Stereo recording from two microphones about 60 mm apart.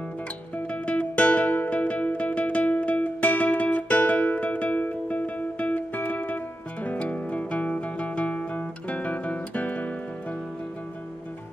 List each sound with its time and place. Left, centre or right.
0.7 s music: centre